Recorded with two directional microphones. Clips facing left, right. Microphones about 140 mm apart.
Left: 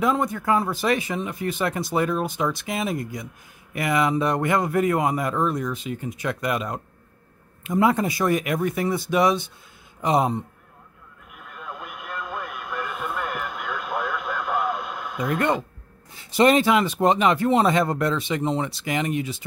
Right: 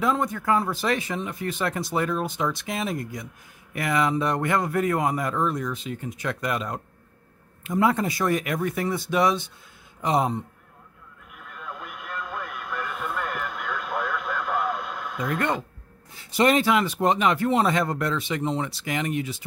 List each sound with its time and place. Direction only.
0.0 s speech: 10° left (ahead or behind)
11.3 s radio: 15° left (ahead or behind)
16.2 s speech: 25° left (ahead or behind)